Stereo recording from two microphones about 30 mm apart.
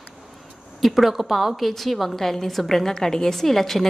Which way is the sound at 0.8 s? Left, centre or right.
Centre.